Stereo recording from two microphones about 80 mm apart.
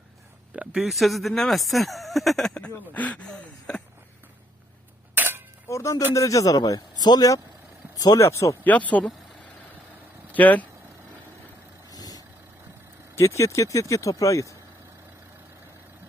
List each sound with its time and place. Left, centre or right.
0.5 s speech: centre
0.9 s speech: centre
2.6 s speech: centre
5.1 s a sound: right
5.6 s a man's voice: left
8.3 s speech: left
8.6 s speech: centre
11.9 s vehicle: left
13.1 s speech: left